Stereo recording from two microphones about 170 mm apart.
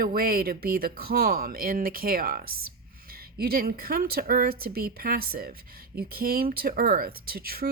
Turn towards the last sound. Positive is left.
turn(degrees=-60)  # may be behind; listen again after turning